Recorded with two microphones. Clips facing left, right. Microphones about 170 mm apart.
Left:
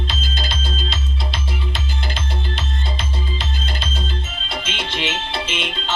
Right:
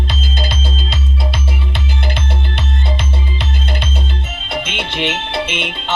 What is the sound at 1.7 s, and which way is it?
Music, 65° right (ahead or behind).